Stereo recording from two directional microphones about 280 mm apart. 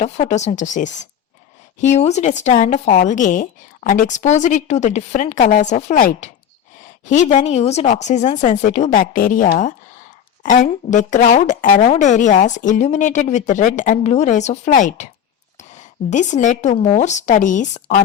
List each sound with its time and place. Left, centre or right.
0.0 s a woman's voice: left